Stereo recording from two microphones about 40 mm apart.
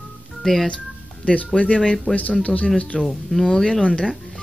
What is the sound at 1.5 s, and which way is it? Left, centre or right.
Speech, left.